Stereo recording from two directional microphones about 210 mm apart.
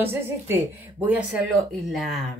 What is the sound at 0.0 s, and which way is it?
A woman's voice, 10° right (ahead or behind).